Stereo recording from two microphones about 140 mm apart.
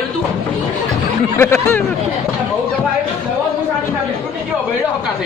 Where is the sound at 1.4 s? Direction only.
15° left (ahead or behind).